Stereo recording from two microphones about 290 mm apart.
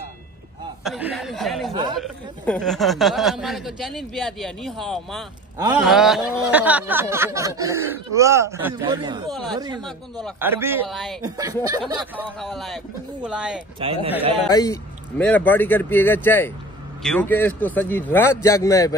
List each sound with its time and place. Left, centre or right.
0.8 s speech: centre
9.3 s speech: centre
11.2 s speech: centre
11.8 s speech: centre
13.7 s a man's voice: centre
14.5 s speech: centre